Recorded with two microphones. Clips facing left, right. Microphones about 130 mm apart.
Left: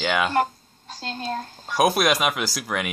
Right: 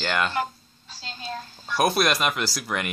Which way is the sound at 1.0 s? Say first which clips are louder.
Left 6 dB; 50° left (ahead or behind).